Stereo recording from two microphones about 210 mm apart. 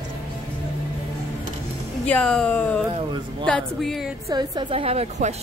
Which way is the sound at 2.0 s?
5° left (ahead or behind).